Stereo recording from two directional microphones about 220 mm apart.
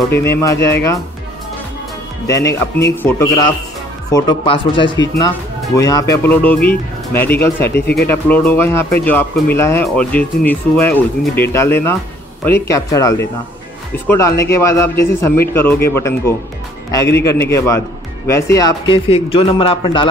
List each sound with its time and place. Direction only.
0.1 s speech: 45° left (ahead or behind)
2.2 s speech: 15° left (ahead or behind)
7.8 s speech: 45° left (ahead or behind)
8.1 s speech: 10° left (ahead or behind)